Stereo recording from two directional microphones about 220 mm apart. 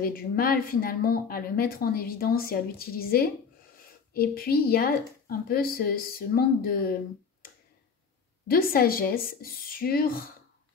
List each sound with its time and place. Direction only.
0.0 s speech: 40° left (ahead or behind)
8.5 s speech: 45° left (ahead or behind)